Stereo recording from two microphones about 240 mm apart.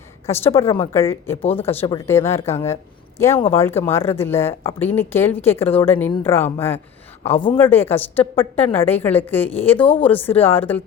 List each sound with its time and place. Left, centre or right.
0.3 s a woman's voice: centre
1.4 s speech: left
1.6 s a woman's voice: centre
7.3 s speech: left
7.6 s a woman's voice: centre
9.8 s speech: left
10.1 s a woman's voice: centre